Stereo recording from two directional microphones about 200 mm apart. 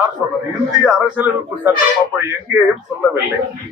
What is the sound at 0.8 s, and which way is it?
Speech, 5° right (ahead or behind).